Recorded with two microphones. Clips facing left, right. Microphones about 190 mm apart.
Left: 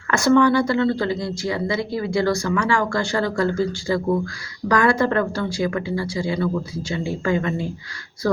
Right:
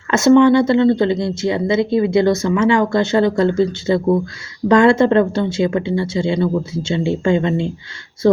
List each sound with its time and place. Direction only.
0.1 s speech: 20° right (ahead or behind)